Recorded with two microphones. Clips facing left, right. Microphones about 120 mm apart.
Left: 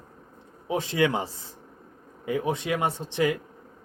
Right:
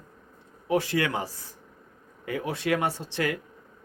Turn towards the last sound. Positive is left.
turn(degrees=20)  # may be behind; listen again after turning